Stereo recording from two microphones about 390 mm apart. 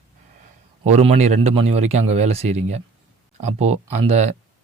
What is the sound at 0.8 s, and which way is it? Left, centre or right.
A man's voice, centre.